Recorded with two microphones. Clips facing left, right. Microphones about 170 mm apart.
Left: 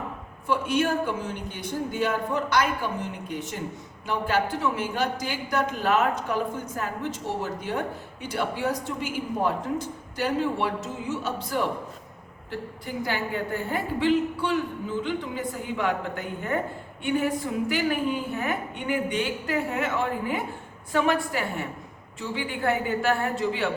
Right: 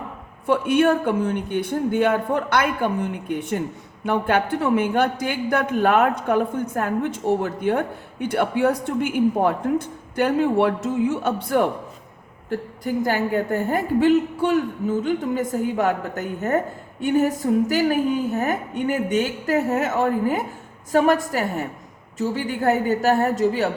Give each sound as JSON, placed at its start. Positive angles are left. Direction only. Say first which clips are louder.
{"t": 0.4, "sound": "speech", "louder": "right 7 dB", "side_deg": -55}
{"t": 12.5, "sound": "a woman's voice", "louder": "right 8 dB", "side_deg": -45}